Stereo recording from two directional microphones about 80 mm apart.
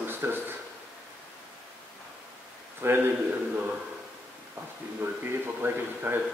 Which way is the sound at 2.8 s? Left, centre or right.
Right.